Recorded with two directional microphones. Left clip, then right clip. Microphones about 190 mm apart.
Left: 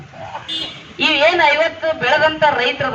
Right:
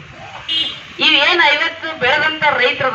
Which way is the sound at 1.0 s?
55° left (ahead or behind).